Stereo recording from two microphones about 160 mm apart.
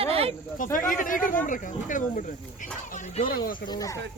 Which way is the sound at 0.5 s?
55° left (ahead or behind).